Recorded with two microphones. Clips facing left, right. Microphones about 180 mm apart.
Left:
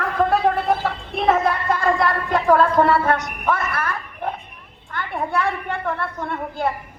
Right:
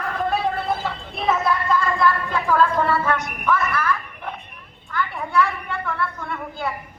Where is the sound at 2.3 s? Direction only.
50° left (ahead or behind).